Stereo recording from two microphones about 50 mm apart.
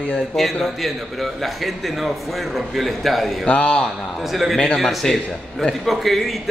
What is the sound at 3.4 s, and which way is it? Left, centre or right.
Speech, left.